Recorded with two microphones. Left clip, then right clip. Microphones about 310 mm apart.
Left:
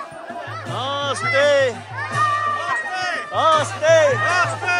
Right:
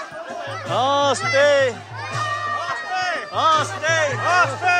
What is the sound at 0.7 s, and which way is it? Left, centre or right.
Music, centre.